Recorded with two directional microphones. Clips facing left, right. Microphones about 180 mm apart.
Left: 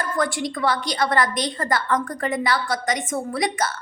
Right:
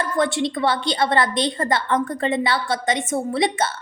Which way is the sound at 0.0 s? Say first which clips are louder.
Right 3 dB; 25° right (ahead or behind).